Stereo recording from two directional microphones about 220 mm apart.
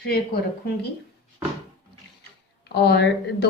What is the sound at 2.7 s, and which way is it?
Speech, 50° left (ahead or behind).